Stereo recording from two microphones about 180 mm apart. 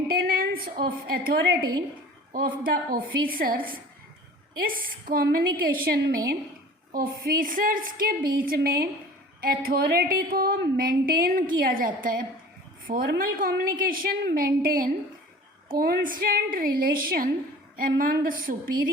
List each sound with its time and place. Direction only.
0.1 s a woman's voice: 55° right (ahead or behind)